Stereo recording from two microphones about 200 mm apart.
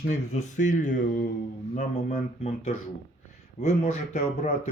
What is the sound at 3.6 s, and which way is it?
Speech, 35° left (ahead or behind).